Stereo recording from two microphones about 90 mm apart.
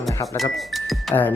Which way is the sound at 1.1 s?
45° left (ahead or behind).